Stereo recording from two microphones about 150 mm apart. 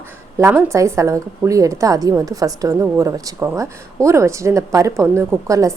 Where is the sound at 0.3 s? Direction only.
20° right (ahead or behind).